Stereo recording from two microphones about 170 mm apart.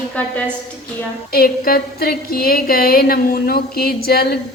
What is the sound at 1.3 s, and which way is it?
A woman's voice, 60° left (ahead or behind).